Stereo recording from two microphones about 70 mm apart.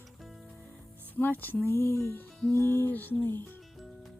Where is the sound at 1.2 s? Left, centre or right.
Left.